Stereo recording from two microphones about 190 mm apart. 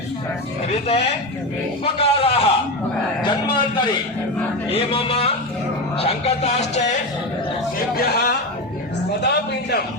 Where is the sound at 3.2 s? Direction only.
25° left (ahead or behind).